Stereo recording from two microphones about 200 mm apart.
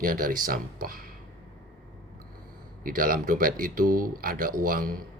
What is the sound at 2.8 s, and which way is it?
Speech, 45° right (ahead or behind).